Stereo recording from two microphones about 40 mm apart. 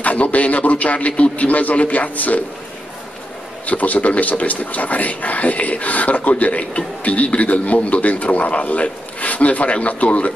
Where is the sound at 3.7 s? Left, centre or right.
Left.